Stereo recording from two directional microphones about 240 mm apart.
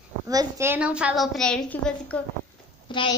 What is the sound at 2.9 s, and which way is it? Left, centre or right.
Speech, centre.